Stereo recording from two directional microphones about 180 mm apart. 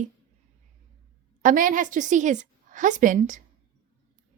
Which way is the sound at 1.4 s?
45° right (ahead or behind).